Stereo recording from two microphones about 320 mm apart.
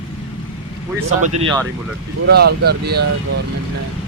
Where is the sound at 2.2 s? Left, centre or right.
Right.